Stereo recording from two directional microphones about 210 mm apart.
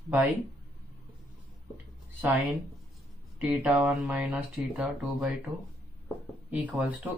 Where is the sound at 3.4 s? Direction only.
5° right (ahead or behind).